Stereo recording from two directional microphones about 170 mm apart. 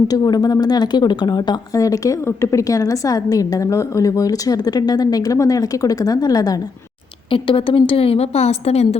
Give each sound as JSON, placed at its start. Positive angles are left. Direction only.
{"t": 0.1, "sound": "speech", "side_deg": 25}
{"t": 7.3, "sound": "a woman's voice", "side_deg": 30}